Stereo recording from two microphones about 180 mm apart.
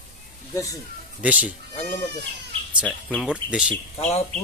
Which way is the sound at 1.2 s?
10° right (ahead or behind).